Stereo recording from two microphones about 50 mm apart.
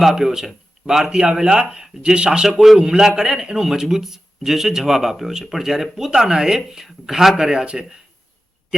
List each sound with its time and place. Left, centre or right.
0.0 s a man's voice: centre